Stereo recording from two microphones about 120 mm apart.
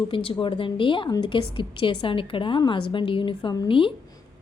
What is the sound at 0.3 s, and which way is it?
A woman's voice, 45° left (ahead or behind).